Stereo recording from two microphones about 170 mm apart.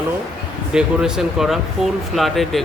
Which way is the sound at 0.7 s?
5° right (ahead or behind).